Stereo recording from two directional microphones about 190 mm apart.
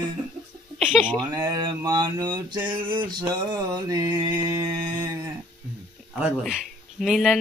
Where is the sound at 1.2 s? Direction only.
20° right (ahead or behind).